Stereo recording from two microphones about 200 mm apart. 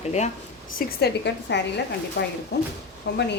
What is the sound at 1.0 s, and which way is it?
Speech, 55° left (ahead or behind).